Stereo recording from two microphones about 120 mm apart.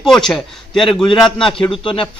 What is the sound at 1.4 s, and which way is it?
Speech, 45° left (ahead or behind).